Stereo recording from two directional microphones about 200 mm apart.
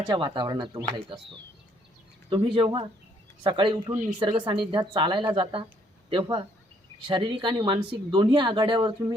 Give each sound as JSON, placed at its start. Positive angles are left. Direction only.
{"t": 0.1, "sound": "speech", "side_deg": -25}